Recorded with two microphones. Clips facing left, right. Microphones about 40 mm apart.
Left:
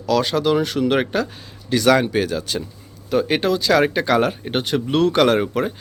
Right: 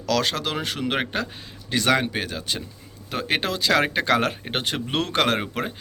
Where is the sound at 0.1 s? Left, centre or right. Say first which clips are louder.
Left 6 dB; right.